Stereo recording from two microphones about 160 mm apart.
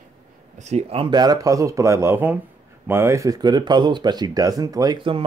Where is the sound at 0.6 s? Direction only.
45° right (ahead or behind).